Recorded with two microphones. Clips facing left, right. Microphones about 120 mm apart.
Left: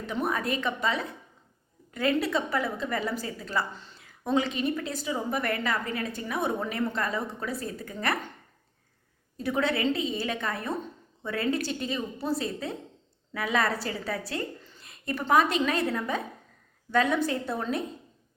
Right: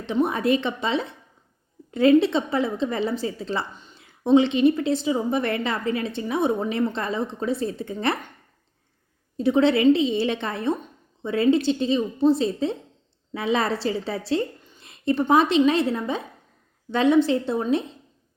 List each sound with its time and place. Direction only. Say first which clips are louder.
0.0 s a woman's voice: right 7 dB; 25° right (ahead or behind)
9.4 s a woman's voice: right 9 dB; 25° right (ahead or behind)